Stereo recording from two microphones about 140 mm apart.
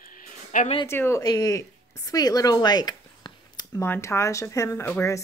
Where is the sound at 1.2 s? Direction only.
25° left (ahead or behind).